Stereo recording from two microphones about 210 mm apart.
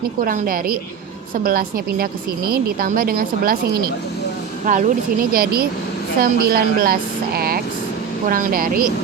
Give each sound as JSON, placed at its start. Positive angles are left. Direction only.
{"t": 0.3, "sound": "speech", "side_deg": -40}